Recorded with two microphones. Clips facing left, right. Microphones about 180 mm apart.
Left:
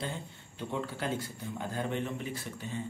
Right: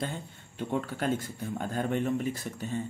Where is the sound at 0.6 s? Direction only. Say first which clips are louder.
Right 4 dB; 55° right (ahead or behind).